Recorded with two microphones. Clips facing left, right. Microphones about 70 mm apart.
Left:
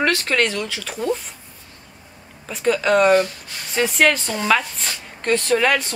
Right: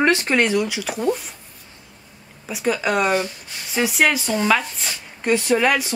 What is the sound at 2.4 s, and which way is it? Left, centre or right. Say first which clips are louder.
Speech: left 3 dB; centre.